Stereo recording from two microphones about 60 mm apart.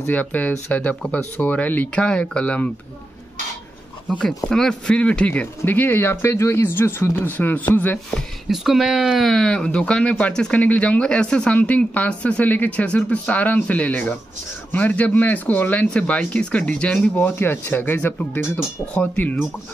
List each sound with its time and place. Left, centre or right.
0.0 s speech: left
2.0 s speech: centre
4.5 s speech: centre
5.3 s speech: left
6.3 s speech: left
8.5 s speech: centre
9.3 s speech: centre; by 19.4 s left